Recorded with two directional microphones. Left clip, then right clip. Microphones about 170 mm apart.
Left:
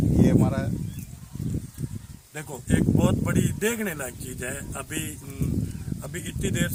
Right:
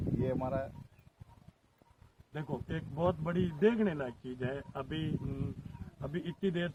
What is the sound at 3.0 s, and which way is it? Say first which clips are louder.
Speech: left 7 dB; 20° left (ahead or behind).